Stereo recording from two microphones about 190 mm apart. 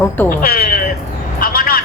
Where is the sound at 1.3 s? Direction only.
50° left (ahead or behind).